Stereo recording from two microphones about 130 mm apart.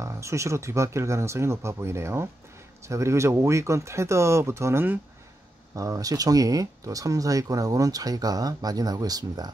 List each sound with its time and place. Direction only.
0.0 s speech: 20° right (ahead or behind)